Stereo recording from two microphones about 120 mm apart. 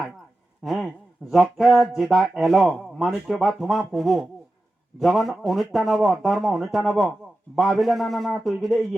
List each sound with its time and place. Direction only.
0.6 s speech: centre (ahead or behind)